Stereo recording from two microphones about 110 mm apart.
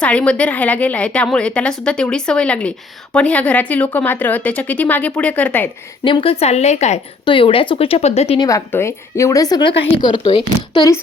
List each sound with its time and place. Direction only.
0.0 s a woman's voice: 10° left (ahead or behind)
6.1 s a woman's voice: 55° left (ahead or behind); by 7.0 s 90° left
7.3 s speech: 50° left (ahead or behind); by 8.4 s 75° left (ahead or behind)
8.4 s a woman's voice: 25° left (ahead or behind)
10.2 s a woman's voice: 50° left (ahead or behind)